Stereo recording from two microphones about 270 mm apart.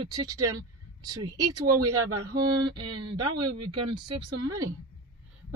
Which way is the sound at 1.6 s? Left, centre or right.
Right.